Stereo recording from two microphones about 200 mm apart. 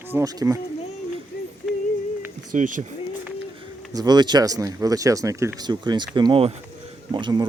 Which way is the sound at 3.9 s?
20° right (ahead or behind).